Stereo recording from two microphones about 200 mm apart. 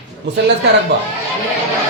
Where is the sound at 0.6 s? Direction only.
60° right (ahead or behind).